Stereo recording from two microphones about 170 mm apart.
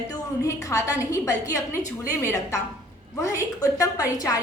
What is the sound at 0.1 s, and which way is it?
A woman's voice, 20° left (ahead or behind).